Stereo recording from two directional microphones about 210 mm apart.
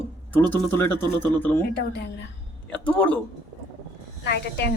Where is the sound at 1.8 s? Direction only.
50° left (ahead or behind).